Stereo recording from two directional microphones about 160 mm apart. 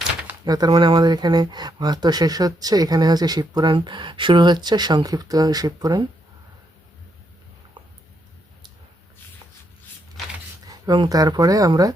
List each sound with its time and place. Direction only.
0.4 s speech: 25° right (ahead or behind)
10.7 s speech: 25° right (ahead or behind)